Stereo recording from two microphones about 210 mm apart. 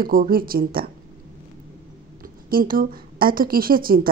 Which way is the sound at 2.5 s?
40° right (ahead or behind).